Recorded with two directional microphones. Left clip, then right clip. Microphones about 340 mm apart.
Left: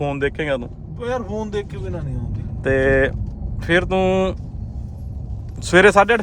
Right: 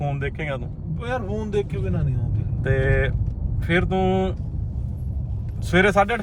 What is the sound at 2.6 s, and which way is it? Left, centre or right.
Speech, left.